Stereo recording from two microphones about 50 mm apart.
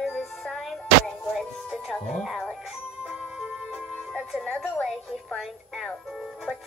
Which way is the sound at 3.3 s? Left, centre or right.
Centre.